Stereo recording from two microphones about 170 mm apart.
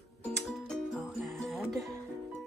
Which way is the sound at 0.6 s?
Centre (ahead or behind).